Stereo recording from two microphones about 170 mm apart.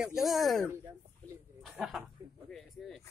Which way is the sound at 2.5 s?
Centre (ahead or behind).